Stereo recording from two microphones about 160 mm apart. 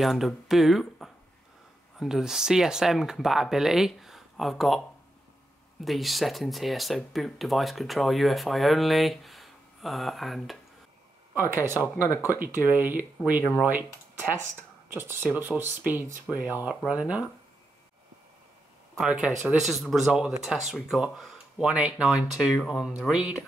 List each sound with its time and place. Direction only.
0.0 s speech: centre (ahead or behind)
5.9 s speech: centre (ahead or behind)
11.3 s speech: 15° right (ahead or behind)
14.9 s speech: 15° right (ahead or behind)
18.9 s speech: 5° right (ahead or behind)